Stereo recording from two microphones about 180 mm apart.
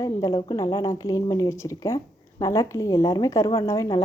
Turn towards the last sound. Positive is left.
turn(degrees=20)  # may be behind; listen again after turning